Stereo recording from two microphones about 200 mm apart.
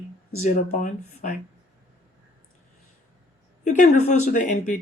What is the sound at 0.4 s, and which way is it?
Speech, 35° left (ahead or behind).